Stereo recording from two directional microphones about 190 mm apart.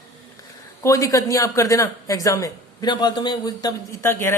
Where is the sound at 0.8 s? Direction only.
15° left (ahead or behind).